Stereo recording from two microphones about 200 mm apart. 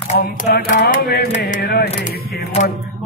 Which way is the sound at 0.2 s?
50° left (ahead or behind).